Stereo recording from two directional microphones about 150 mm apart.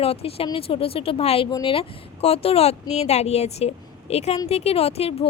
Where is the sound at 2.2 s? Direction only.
40° left (ahead or behind).